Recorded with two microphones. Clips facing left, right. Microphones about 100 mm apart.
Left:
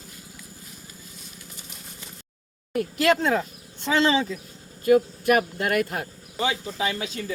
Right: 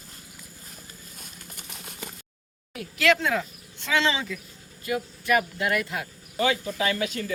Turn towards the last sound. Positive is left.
turn(degrees=25)  # may be behind; listen again after turning